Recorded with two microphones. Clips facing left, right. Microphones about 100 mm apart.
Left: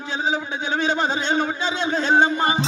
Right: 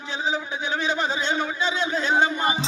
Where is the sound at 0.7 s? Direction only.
30° left (ahead or behind).